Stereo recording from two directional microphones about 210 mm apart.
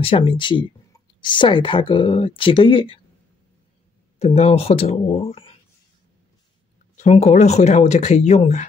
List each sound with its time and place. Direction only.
0.0 s speech: 25° left (ahead or behind)
4.2 s speech: 30° left (ahead or behind)
7.0 s speech: 35° left (ahead or behind)